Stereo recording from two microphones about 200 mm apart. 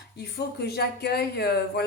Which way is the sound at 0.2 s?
55° left (ahead or behind).